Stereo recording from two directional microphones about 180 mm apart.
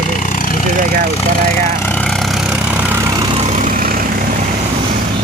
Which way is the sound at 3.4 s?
45° right (ahead or behind).